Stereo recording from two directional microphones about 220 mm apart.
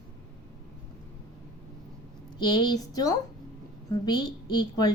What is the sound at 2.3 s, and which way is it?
A woman's voice, 20° left (ahead or behind).